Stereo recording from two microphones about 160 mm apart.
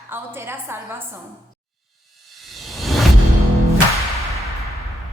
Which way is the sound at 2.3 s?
Centre (ahead or behind).